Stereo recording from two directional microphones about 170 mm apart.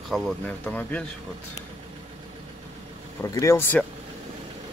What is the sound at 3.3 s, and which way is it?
Speech, 20° left (ahead or behind).